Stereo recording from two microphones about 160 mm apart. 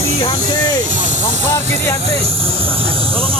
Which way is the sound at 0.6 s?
50° right (ahead or behind).